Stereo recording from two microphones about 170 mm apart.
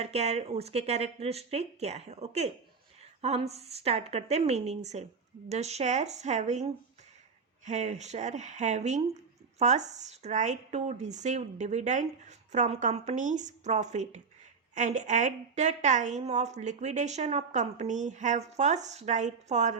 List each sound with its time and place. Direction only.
0.0 s a woman's voice: 40° right (ahead or behind)